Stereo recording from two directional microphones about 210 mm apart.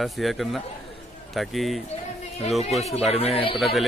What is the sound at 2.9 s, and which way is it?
Speech, 30° left (ahead or behind).